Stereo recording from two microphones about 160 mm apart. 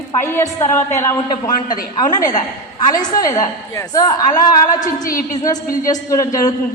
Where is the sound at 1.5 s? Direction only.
60° left (ahead or behind).